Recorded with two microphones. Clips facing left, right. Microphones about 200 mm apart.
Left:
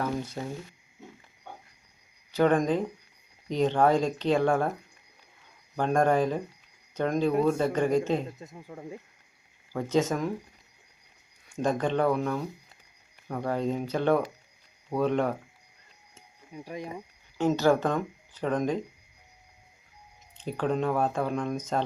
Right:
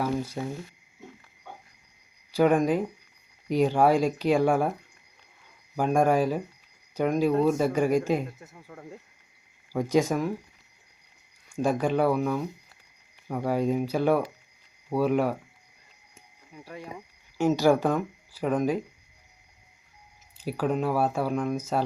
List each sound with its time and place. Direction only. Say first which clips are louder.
0.0 s speech: right 3 dB; 10° right (ahead or behind)
2.3 s speech: right 2 dB; 10° right (ahead or behind)
5.7 s speech: right 1 dB; 10° right (ahead or behind)
8.4 s speech: left 3 dB; 15° left (ahead or behind)
9.7 s speech: right 2 dB; 10° right (ahead or behind)
11.5 s speech: right 2 dB; 10° right (ahead or behind)
16.5 s cricket: left 4 dB; 15° left (ahead or behind)
17.3 s speech: right 2 dB; 10° right (ahead or behind)
20.4 s speech: right 1 dB; 10° right (ahead or behind)